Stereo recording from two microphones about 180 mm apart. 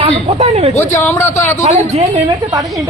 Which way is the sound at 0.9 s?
15° left (ahead or behind).